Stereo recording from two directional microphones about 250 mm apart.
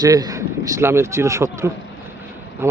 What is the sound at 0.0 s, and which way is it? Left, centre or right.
A man's voice, centre.